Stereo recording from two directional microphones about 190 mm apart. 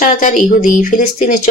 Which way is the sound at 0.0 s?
45° left (ahead or behind).